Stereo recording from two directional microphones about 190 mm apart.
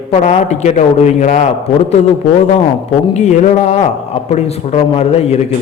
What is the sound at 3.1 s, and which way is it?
A man's voice, 40° left (ahead or behind).